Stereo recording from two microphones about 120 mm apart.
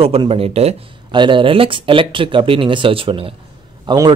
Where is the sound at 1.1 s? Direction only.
40° right (ahead or behind).